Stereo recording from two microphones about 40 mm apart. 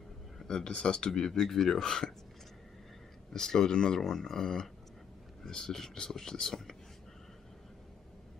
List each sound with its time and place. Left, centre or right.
0.5 s speech: left
3.3 s speech: centre
4.0 s speech: centre